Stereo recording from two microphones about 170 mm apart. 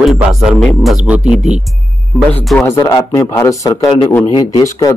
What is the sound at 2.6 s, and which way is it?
A man's voice, 20° left (ahead or behind).